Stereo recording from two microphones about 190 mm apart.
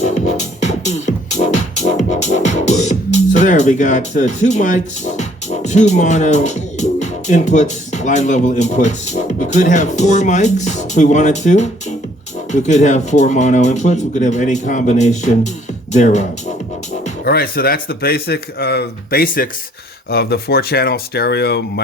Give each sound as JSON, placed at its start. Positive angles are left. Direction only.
{"t": 0.1, "sound": "music", "side_deg": 35}
{"t": 4.4, "sound": "speech", "side_deg": 40}
{"t": 17.2, "sound": "speech", "side_deg": 55}